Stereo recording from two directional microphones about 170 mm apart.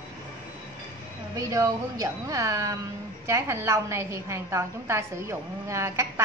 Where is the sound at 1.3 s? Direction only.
20° right (ahead or behind).